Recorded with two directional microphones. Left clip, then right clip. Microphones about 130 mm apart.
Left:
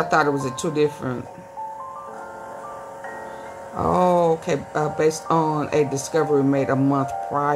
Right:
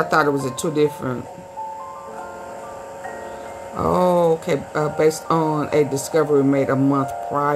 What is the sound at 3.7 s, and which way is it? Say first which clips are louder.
Speech: right 1 dB; 15° right (ahead or behind).